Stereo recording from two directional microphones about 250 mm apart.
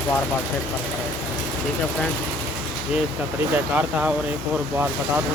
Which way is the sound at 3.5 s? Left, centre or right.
Centre.